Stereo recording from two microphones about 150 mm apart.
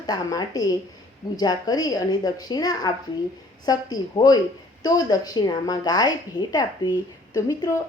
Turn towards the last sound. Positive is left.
turn(degrees=20)  # may be behind; listen again after turning